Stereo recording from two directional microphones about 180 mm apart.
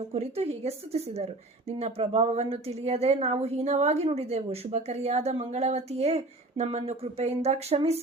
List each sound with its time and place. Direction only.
0.1 s a woman's voice: 35° right (ahead or behind)